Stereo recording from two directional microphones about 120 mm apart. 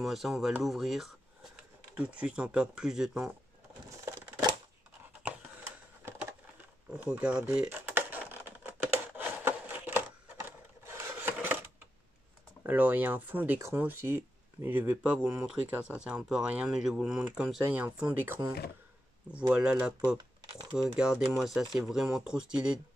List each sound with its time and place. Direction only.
0.0 s speech: centre (ahead or behind)
4.0 s typewriter: 30° right (ahead or behind)
5.2 s typing: 15° right (ahead or behind)
6.9 s a sound: 10° right (ahead or behind)
10.9 s rub: 20° right (ahead or behind)
12.6 s speech: 15° right (ahead or behind)
19.5 s speech: 10° right (ahead or behind)